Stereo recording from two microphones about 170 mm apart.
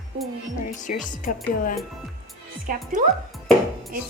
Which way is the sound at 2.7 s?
55° right (ahead or behind).